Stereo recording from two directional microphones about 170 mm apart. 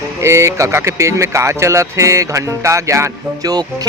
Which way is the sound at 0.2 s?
15° right (ahead or behind).